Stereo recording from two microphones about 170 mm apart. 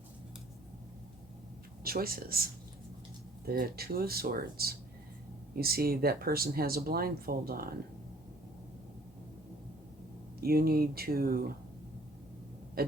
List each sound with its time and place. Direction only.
1.8 s speech: 60° right (ahead or behind)
3.5 s speech: 60° right (ahead or behind)
10.4 s speech: 65° right (ahead or behind)